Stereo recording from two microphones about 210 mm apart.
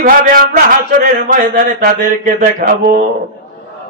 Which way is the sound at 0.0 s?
40° right (ahead or behind).